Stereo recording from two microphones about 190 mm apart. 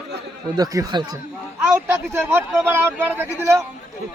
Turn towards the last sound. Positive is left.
turn(degrees=-10)  # may be behind; listen again after turning